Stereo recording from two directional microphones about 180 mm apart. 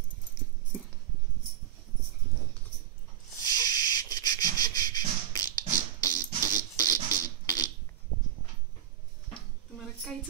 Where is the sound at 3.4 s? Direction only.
20° left (ahead or behind).